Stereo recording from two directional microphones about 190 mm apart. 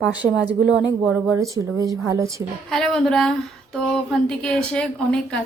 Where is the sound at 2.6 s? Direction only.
5° left (ahead or behind).